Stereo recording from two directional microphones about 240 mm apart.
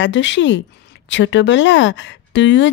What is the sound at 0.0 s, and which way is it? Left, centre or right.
A woman's voice, left.